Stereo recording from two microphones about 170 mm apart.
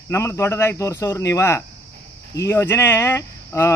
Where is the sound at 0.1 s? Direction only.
15° left (ahead or behind).